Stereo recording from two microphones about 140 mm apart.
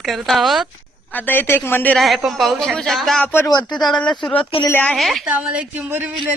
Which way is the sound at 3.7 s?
5° left (ahead or behind).